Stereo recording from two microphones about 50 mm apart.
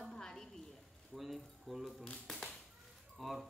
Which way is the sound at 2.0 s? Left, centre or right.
Centre.